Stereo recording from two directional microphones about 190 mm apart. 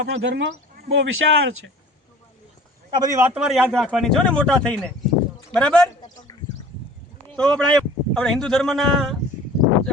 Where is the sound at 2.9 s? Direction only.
15° right (ahead or behind).